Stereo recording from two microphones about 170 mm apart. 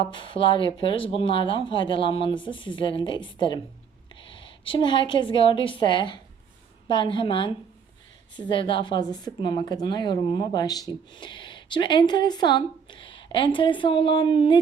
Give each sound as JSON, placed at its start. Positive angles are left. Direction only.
{"t": 0.1, "sound": "speech", "side_deg": 30}
{"t": 4.1, "sound": "a sound", "side_deg": 30}
{"t": 4.7, "sound": "speech", "side_deg": 30}